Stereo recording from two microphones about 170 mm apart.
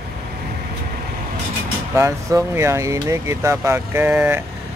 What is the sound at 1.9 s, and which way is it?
Speech, 15° right (ahead or behind).